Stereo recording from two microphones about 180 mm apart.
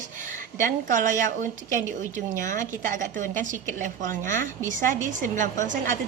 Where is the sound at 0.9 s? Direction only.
45° right (ahead or behind).